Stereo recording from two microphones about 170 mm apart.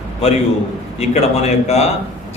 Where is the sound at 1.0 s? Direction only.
40° left (ahead or behind).